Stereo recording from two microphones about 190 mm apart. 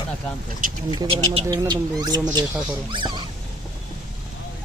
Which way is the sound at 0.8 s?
25° right (ahead or behind).